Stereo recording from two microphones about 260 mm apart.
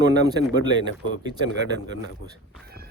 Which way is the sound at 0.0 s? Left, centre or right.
Centre.